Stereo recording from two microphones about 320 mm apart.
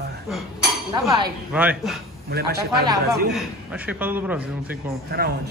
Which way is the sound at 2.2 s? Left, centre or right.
Right.